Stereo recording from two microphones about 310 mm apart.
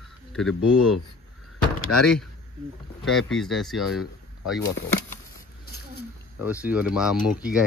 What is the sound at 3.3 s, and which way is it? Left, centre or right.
Speech, centre.